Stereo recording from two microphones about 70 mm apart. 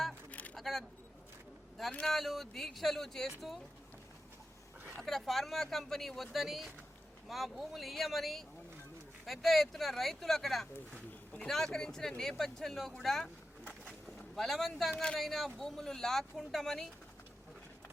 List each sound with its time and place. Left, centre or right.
0.3 s a sound: left
0.5 s single-lens reflex camera: centre
1.9 s speech: centre
2.1 s speech: centre
5.0 s speech: centre
14.3 s speech: centre